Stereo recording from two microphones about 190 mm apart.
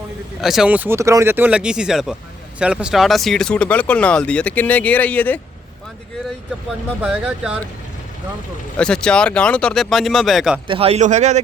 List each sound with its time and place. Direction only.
0.4 s speech: centre (ahead or behind)
7.0 s speech: 5° right (ahead or behind)
8.8 s speech: 5° left (ahead or behind)
10.7 s speech: 30° right (ahead or behind)